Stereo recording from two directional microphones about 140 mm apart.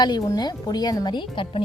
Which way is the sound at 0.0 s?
30° left (ahead or behind).